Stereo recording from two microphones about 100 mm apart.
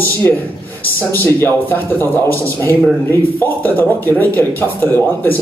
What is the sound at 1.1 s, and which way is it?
A man's voice, 20° left (ahead or behind).